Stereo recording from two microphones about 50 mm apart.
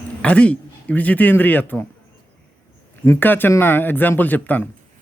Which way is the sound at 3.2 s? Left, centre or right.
Left.